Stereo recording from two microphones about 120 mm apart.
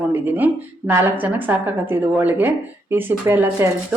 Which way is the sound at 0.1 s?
15° right (ahead or behind).